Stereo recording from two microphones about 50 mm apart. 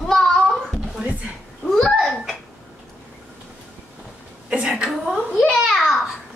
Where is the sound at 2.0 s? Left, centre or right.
Centre.